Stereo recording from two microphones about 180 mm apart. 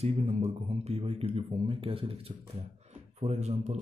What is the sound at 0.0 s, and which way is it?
Speech, 35° right (ahead or behind).